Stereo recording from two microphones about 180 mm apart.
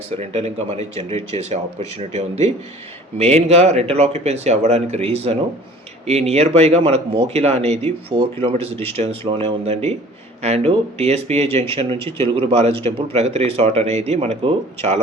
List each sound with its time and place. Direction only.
0.2 s speech: 35° right (ahead or behind)